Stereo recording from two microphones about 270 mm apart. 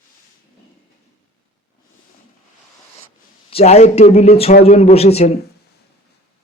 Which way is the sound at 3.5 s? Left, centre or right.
Left.